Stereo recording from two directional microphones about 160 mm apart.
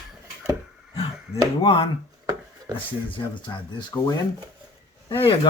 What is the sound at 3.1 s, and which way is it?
Speech, 30° left (ahead or behind).